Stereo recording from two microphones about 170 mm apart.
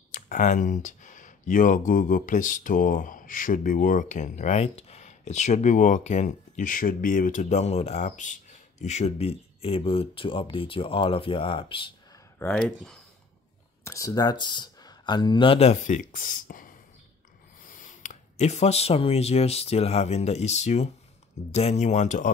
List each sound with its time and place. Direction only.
0.1 s speech: 50° left (ahead or behind); by 11.9 s 30° left (ahead or behind)
12.4 s speech: 5° left (ahead or behind)
13.8 s speech: 20° left (ahead or behind); by 22.3 s 45° left (ahead or behind)